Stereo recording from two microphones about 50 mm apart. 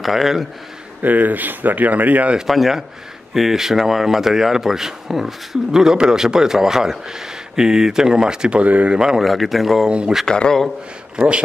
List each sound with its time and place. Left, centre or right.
0.0 s speech: centre
1.0 s speech: right
2.4 s speech: centre; by 8.9 s right
8.9 s speech: centre
9.8 s speech: centre
10.2 s speech: centre
11.1 s speech: right